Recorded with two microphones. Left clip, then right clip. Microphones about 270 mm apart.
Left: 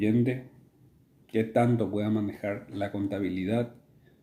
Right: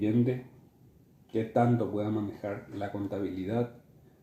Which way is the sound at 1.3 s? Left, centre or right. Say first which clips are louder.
Left 2 dB; left.